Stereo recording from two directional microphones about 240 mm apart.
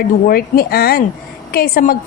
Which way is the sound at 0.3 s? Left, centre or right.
Left.